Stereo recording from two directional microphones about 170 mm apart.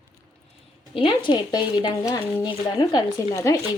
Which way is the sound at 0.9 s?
30° left (ahead or behind).